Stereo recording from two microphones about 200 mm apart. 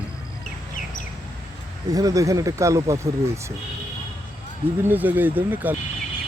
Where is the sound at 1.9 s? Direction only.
15° right (ahead or behind).